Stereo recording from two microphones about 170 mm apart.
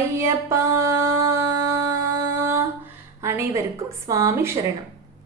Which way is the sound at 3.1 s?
15° right (ahead or behind).